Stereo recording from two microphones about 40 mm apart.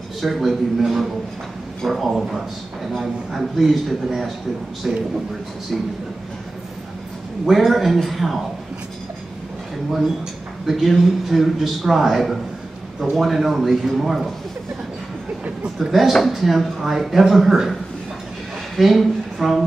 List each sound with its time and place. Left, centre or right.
0.2 s speech: centre
4.8 s speech: centre
7.4 s speech: centre
10.7 s speech: centre
15.9 s speech: centre
18.8 s speech: centre